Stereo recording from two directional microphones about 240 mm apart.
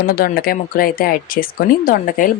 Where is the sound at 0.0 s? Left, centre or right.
Left.